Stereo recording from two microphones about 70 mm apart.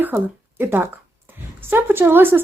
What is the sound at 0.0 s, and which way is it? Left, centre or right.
Speech, right.